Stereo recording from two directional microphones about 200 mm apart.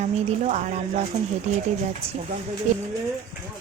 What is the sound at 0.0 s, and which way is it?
Speech, 35° right (ahead or behind).